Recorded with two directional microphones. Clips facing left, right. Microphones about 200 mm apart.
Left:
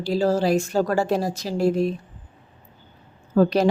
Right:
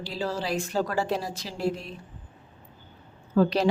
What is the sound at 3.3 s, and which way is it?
Speech, 45° left (ahead or behind).